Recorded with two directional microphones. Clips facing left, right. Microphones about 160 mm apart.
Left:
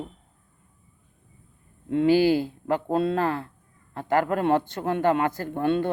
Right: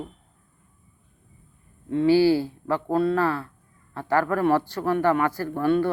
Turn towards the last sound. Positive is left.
turn(degrees=25)  # may be behind; listen again after turning